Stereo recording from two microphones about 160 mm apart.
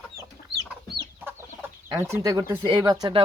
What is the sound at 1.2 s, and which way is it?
Speech, 15° right (ahead or behind).